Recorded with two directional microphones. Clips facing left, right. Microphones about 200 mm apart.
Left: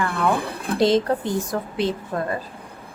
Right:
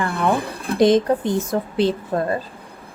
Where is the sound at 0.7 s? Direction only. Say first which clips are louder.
Right 3 dB; 20° right (ahead or behind).